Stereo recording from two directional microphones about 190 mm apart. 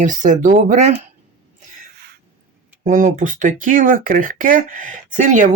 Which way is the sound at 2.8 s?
40° right (ahead or behind).